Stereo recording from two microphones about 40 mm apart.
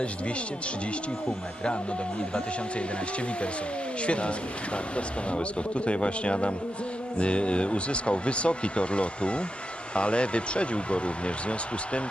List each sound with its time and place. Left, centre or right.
4.0 s speech: left